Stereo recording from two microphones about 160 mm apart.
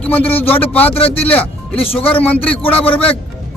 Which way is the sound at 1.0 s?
40° left (ahead or behind).